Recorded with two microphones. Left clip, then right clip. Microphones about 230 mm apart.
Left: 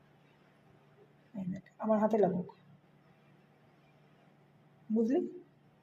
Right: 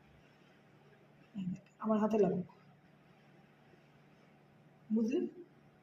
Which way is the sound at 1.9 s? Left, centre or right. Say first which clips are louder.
Left 4 dB; left.